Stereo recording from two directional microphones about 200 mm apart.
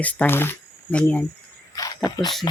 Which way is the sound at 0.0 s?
5° left (ahead or behind).